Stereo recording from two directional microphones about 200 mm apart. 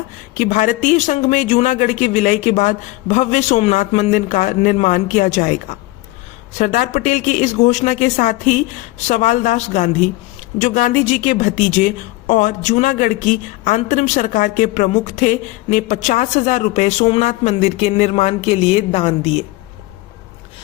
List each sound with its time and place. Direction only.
0.3 s a woman's voice: 40° left (ahead or behind)